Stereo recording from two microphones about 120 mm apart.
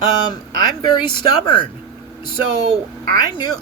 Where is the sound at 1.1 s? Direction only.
40° left (ahead or behind).